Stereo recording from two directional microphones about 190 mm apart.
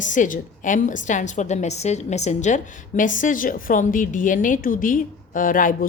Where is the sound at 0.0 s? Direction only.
40° left (ahead or behind).